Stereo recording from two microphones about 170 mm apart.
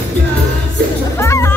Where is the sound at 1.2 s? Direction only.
15° left (ahead or behind).